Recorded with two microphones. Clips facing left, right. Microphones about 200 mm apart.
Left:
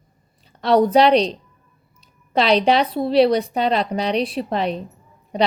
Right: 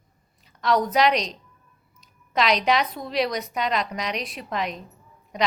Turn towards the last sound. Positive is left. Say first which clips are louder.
# left 6 dB
turn(degrees=30)  # may be behind; listen again after turning